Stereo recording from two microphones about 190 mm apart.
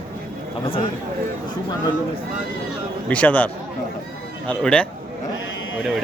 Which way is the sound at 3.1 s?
5° left (ahead or behind).